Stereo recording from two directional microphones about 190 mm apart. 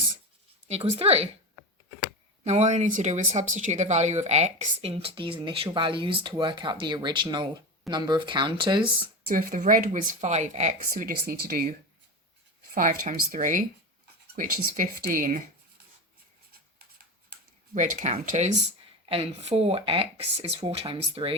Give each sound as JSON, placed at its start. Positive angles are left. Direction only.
{"t": 0.7, "sound": "speech", "side_deg": -35}
{"t": 2.4, "sound": "speech", "side_deg": -35}
{"t": 9.2, "sound": "speech", "side_deg": -45}
{"t": 12.7, "sound": "speech", "side_deg": -45}
{"t": 17.7, "sound": "speech", "side_deg": -40}